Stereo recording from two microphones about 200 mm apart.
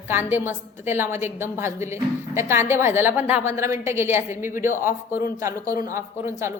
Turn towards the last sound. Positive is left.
turn(degrees=-15)  # may be behind; listen again after turning